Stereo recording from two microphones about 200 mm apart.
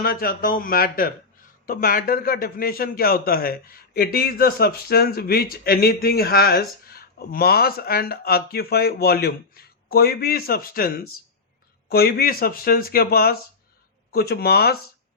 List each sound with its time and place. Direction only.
0.0 s a man's voice: 50° left (ahead or behind)